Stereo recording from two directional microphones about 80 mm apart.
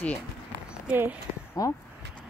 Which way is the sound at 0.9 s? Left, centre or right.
Right.